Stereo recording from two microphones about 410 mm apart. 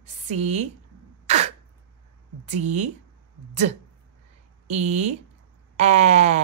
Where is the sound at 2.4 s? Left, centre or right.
Centre.